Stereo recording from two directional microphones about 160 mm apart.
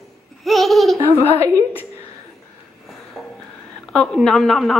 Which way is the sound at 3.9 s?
5° left (ahead or behind).